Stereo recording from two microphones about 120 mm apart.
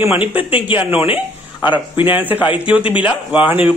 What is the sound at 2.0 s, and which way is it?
A man's voice, 15° right (ahead or behind).